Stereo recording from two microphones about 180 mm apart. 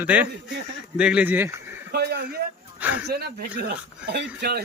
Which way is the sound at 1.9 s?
60° right (ahead or behind).